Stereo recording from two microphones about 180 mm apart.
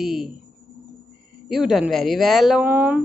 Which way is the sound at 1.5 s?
Centre (ahead or behind).